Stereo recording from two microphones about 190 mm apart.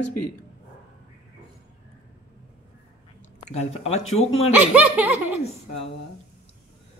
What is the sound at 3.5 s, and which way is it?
Speech, 35° left (ahead or behind).